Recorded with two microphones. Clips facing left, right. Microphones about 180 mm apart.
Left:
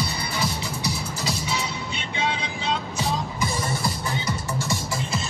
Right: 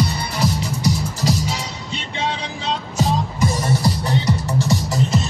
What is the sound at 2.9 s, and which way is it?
Music, 40° right (ahead or behind).